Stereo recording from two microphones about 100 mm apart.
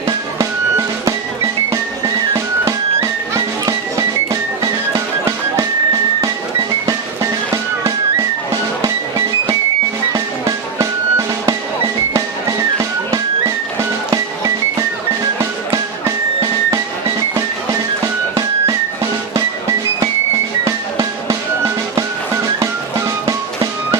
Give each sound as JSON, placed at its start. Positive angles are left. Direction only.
{"t": 0.3, "sound": "music", "side_deg": -30}
{"t": 2.3, "sound": "music", "side_deg": -30}
{"t": 6.8, "sound": "music", "side_deg": -35}
{"t": 20.7, "sound": "music", "side_deg": -35}